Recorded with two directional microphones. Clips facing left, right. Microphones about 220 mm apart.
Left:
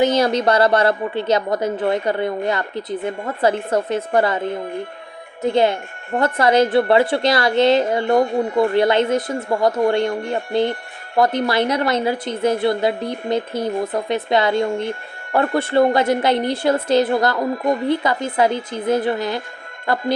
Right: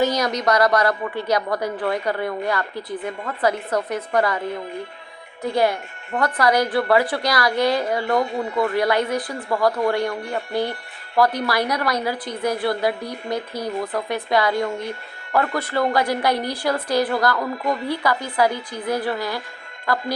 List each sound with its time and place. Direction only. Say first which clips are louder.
0.0 s a woman's voice: left 4 dB; 25° left (ahead or behind)